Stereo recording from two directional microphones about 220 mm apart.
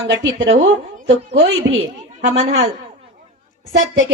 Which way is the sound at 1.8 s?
30° right (ahead or behind).